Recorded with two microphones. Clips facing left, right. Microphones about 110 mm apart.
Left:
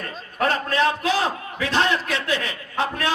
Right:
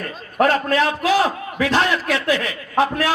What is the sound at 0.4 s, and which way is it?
Speech, 30° left (ahead or behind).